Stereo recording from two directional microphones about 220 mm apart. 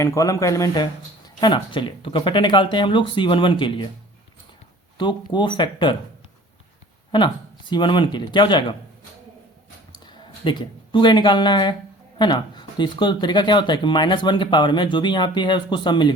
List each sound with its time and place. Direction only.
0.0 s speech: 15° left (ahead or behind)
4.9 s speech: 20° left (ahead or behind)
7.1 s speech: 20° left (ahead or behind)
10.1 s speech: 20° left (ahead or behind)